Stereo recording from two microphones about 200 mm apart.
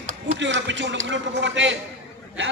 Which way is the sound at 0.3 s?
65° right (ahead or behind).